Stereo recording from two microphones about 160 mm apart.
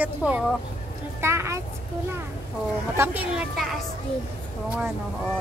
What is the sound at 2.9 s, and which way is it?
Speech, 10° right (ahead or behind).